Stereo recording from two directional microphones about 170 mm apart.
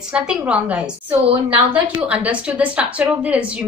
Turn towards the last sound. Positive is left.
turn(degrees=-10)  # may be behind; listen again after turning